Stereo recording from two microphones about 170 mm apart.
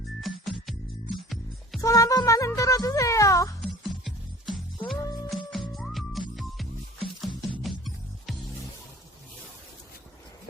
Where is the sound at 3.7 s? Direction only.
Centre (ahead or behind).